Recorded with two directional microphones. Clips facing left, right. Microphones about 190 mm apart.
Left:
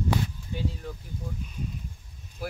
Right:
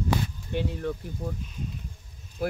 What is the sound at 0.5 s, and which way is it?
Speech, 65° right (ahead or behind).